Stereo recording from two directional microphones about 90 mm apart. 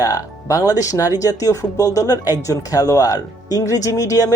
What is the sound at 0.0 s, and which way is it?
Speech, 45° left (ahead or behind).